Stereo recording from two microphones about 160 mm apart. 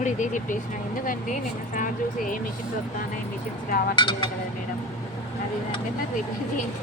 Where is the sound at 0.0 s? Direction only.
50° left (ahead or behind).